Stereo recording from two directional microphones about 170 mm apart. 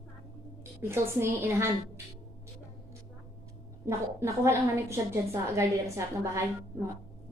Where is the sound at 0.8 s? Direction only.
15° right (ahead or behind).